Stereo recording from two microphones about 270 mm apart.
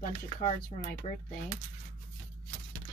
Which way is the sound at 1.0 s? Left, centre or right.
Left.